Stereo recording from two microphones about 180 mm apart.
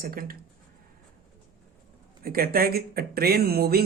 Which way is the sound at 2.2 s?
55° right (ahead or behind).